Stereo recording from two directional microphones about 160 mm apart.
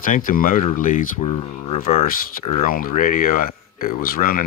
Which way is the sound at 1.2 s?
35° left (ahead or behind).